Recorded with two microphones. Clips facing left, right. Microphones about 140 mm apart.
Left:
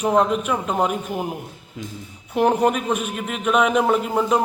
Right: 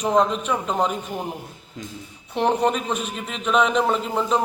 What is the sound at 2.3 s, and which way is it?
A man's voice, 5° left (ahead or behind).